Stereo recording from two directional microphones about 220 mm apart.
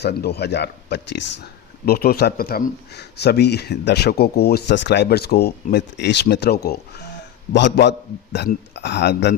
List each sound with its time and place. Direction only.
0.0 s speech: 50° left (ahead or behind)